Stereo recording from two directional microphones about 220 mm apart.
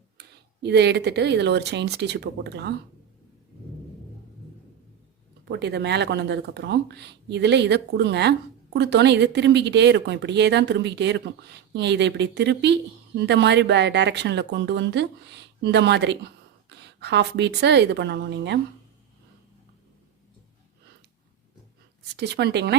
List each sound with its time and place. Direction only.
0.2 s speech: 50° right (ahead or behind)
5.5 s speech: 50° right (ahead or behind)
22.1 s speech: 50° right (ahead or behind)